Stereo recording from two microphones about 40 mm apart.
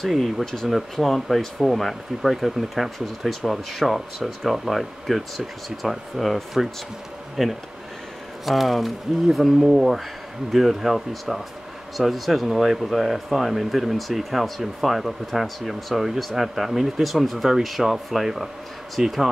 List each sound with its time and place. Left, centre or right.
0.0 s speech: centre